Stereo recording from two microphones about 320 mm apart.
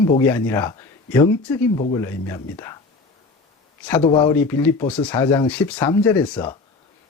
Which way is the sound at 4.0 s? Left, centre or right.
Centre.